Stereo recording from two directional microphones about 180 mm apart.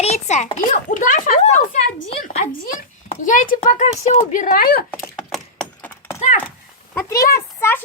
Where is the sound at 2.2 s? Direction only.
50° left (ahead or behind).